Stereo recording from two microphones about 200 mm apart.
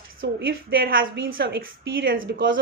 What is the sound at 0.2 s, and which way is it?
Speech, 55° right (ahead or behind).